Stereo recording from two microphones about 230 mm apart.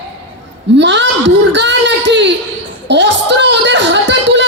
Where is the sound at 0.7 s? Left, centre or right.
Right.